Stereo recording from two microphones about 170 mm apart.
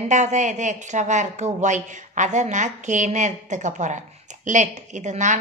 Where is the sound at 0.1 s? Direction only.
45° right (ahead or behind).